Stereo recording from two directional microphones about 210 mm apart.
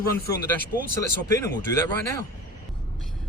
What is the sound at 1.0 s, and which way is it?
Speech, 15° left (ahead or behind).